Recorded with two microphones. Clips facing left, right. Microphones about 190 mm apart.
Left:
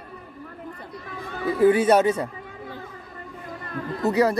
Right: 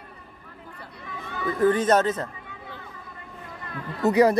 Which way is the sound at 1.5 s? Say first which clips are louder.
Left 3 dB; 10° left (ahead or behind).